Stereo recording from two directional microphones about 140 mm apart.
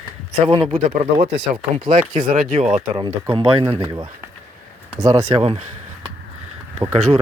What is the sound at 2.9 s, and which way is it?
Speech, 35° right (ahead or behind).